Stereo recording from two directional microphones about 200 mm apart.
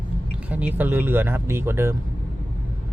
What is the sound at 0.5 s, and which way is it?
Speech, 10° right (ahead or behind).